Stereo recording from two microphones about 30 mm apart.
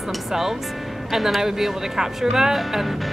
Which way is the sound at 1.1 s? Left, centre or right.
Centre.